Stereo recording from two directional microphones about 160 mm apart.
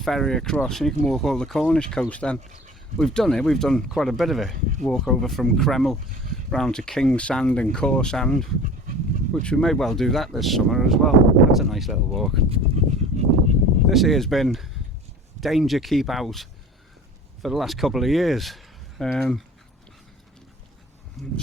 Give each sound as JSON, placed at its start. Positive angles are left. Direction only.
{"t": 0.0, "sound": "speech", "side_deg": 0}
{"t": 12.5, "sound": "a sound", "side_deg": -40}
{"t": 13.8, "sound": "speech", "side_deg": 0}
{"t": 21.2, "sound": "speech", "side_deg": 0}